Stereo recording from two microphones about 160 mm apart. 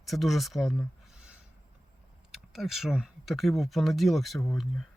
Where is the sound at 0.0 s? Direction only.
Centre (ahead or behind).